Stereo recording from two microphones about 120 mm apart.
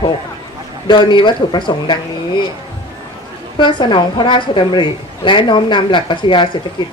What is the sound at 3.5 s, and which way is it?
A woman's voice, 40° left (ahead or behind).